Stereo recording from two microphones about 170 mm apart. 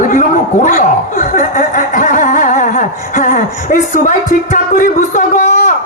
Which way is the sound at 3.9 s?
50° left (ahead or behind).